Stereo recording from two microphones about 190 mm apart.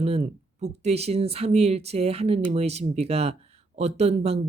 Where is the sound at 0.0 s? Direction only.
30° right (ahead or behind).